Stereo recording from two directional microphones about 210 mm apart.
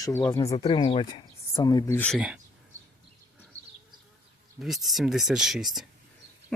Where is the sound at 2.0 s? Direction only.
Centre (ahead or behind).